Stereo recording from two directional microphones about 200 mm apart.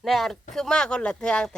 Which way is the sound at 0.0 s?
Centre (ahead or behind).